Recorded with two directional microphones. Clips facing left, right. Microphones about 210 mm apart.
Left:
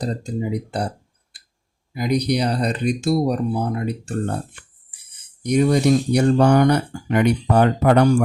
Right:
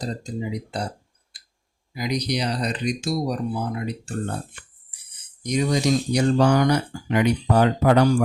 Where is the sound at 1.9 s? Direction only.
55° left (ahead or behind).